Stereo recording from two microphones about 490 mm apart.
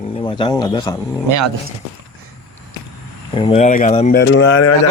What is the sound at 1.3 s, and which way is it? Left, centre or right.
Speech, right.